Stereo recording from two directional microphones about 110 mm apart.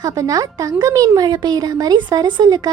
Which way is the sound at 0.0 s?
35° right (ahead or behind).